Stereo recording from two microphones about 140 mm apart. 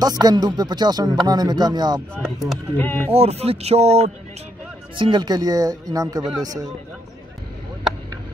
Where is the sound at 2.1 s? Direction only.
Centre (ahead or behind).